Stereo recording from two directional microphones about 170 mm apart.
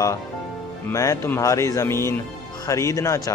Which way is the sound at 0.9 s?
15° left (ahead or behind).